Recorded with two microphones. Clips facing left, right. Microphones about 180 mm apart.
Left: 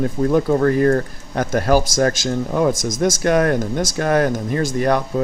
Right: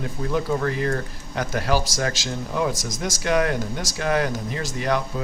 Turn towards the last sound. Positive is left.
turn(degrees=50)  # may be behind; listen again after turning